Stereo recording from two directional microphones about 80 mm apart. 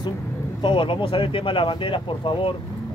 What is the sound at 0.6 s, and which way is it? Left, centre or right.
Speech, left.